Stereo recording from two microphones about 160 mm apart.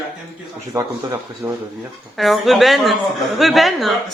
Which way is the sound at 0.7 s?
20° right (ahead or behind).